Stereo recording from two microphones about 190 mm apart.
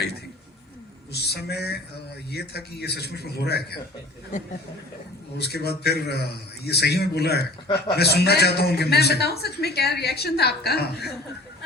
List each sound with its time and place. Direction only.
1.1 s a man's voice: 60° left (ahead or behind)
4.3 s speech: 40° left (ahead or behind)
5.4 s a man's voice: 60° left (ahead or behind)